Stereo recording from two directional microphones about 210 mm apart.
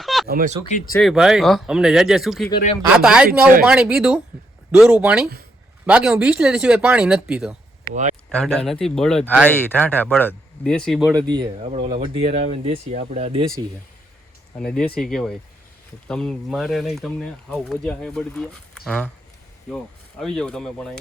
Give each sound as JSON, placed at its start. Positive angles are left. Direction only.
{"t": 0.0, "sound": "a sound", "side_deg": 0}
{"t": 0.3, "sound": "speech", "side_deg": -45}
{"t": 1.0, "sound": "speech", "side_deg": 0}
{"t": 11.1, "sound": "speech", "side_deg": -20}
{"t": 14.6, "sound": "speech", "side_deg": 5}